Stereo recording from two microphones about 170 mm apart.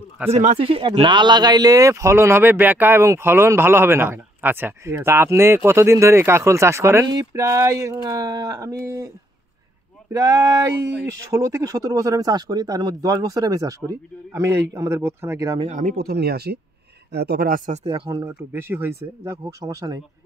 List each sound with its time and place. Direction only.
0.3 s speech: 40° right (ahead or behind); by 15.6 s 20° right (ahead or behind)
15.6 s speech: 45° right (ahead or behind)
17.8 s speech: 30° right (ahead or behind)
18.2 s speech: 10° right (ahead or behind)